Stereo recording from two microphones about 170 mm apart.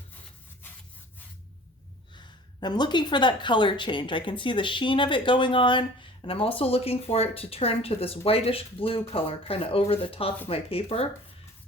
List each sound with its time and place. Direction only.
2.1 s a woman's voice: 25° left (ahead or behind)